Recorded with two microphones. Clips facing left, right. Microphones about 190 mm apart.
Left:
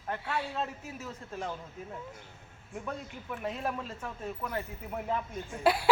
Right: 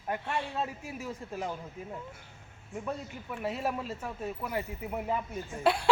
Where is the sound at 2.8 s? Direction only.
5° right (ahead or behind).